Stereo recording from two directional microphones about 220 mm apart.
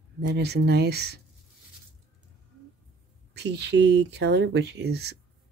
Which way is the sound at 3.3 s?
50° right (ahead or behind).